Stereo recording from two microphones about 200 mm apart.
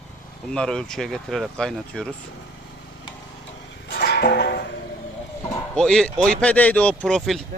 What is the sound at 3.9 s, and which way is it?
Music, 50° left (ahead or behind).